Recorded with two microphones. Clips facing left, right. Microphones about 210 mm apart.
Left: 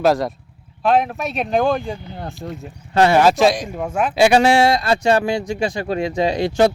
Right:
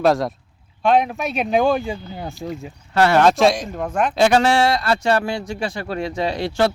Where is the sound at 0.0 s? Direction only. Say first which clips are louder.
Left 1 dB; centre (ahead or behind).